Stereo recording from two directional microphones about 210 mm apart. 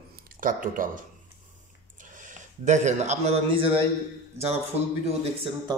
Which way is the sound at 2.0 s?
40° right (ahead or behind).